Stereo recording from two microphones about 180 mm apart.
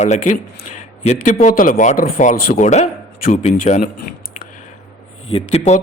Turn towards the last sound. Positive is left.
turn(degrees=35)  # may be behind; listen again after turning